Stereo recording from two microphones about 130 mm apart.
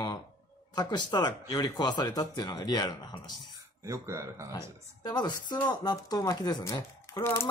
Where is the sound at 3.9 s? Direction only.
20° right (ahead or behind).